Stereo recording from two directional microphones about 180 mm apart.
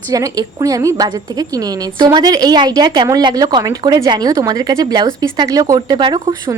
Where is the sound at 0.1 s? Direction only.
20° right (ahead or behind).